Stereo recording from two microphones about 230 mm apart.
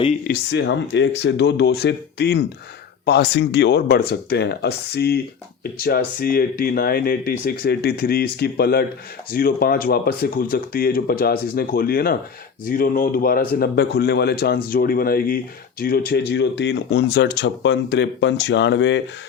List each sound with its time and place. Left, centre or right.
0.3 s speech: left